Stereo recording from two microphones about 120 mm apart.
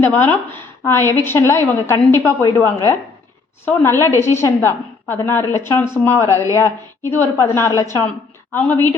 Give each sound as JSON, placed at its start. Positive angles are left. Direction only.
{"t": 0.0, "sound": "a woman's voice", "side_deg": 15}